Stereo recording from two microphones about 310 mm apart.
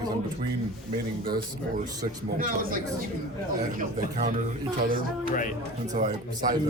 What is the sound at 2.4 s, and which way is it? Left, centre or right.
A man's voice, right.